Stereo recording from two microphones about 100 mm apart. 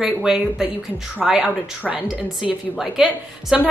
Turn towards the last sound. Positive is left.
turn(degrees=-5)  # may be behind; listen again after turning